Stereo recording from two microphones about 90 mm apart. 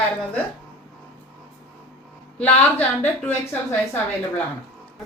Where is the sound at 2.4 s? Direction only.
20° left (ahead or behind).